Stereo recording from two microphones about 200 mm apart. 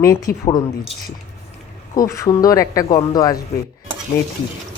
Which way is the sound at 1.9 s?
15° left (ahead or behind).